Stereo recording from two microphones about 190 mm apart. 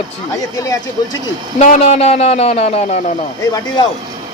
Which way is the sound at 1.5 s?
35° left (ahead or behind).